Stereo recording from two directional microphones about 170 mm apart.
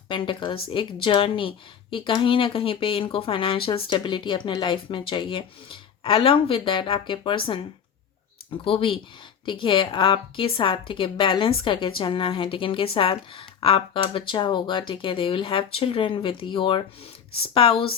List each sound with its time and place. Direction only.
0.1 s a woman's voice: 30° left (ahead or behind)